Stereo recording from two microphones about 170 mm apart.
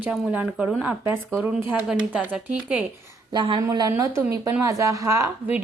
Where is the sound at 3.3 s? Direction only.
25° right (ahead or behind).